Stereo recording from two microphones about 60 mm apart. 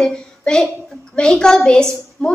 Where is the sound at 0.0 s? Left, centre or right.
Centre.